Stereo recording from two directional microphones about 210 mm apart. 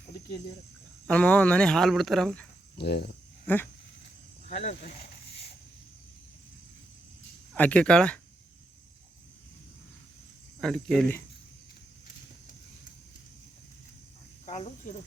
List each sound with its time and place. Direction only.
1.0 s speech: 5° left (ahead or behind)
2.7 s speech: 50° left (ahead or behind)
3.4 s speech: 10° left (ahead or behind)
4.4 s speech: 35° left (ahead or behind)
7.5 s speech: 5° left (ahead or behind)
10.6 s speech: centre (ahead or behind)
14.4 s cricket: 30° left (ahead or behind)